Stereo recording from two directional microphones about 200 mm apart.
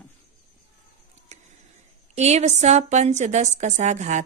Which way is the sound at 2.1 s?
35° right (ahead or behind).